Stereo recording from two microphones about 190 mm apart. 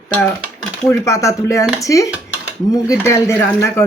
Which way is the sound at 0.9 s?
15° left (ahead or behind).